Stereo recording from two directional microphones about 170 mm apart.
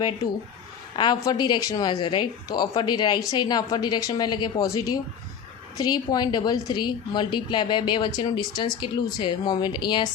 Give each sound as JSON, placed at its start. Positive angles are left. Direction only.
{"t": 0.9, "sound": "a woman's voice", "side_deg": 25}